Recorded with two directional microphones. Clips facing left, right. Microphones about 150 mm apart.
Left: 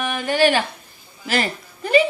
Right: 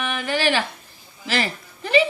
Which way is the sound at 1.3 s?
45° left (ahead or behind).